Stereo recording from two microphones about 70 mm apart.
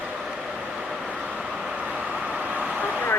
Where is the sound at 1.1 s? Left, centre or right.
Centre.